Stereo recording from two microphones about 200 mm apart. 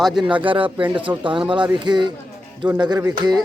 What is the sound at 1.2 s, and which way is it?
Speech, 25° right (ahead or behind).